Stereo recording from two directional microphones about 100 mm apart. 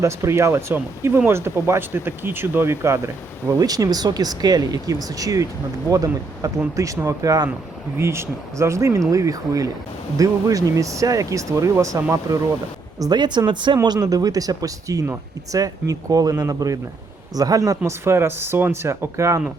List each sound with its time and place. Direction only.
0.0 s speech: 25° right (ahead or behind)
3.6 s speech: 40° right (ahead or behind)
13.0 s speech: 45° right (ahead or behind)
13.8 s speech: 40° right (ahead or behind)